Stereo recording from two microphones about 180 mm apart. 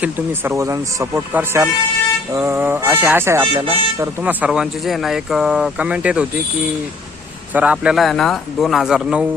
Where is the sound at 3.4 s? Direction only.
30° right (ahead or behind).